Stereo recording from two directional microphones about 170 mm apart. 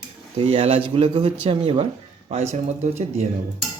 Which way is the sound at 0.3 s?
35° right (ahead or behind).